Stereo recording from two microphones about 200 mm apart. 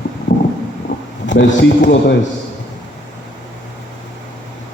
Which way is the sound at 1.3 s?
65° left (ahead or behind).